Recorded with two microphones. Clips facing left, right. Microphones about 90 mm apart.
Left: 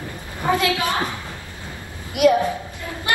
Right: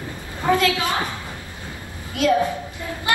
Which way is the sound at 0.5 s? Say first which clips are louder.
Right 1 dB; 20° left (ahead or behind).